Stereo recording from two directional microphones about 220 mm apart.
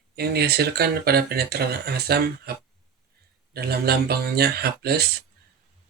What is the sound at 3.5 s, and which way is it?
Speech, 45° right (ahead or behind).